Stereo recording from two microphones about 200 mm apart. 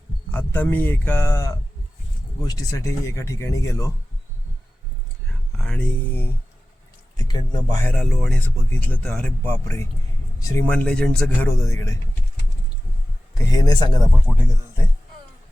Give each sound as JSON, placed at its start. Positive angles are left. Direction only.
{"t": 0.3, "sound": "speech", "side_deg": 10}
{"t": 5.5, "sound": "speech", "side_deg": 5}
{"t": 7.2, "sound": "speech", "side_deg": 20}
{"t": 7.9, "sound": "speech", "side_deg": 5}
{"t": 13.5, "sound": "speech", "side_deg": 20}